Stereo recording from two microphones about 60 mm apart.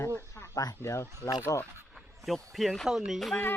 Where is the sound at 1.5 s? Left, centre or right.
Left.